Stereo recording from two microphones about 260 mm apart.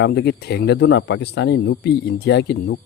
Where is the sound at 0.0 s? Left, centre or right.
Left.